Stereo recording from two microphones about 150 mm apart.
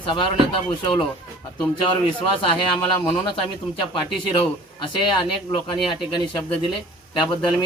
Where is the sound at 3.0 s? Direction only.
35° left (ahead or behind).